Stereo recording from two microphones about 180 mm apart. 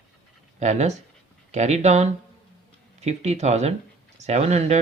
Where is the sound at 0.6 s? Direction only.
40° right (ahead or behind).